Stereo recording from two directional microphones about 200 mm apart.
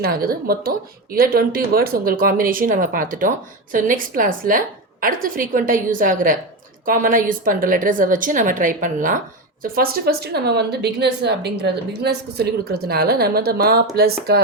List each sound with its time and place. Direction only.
0.0 s speech: 50° right (ahead or behind)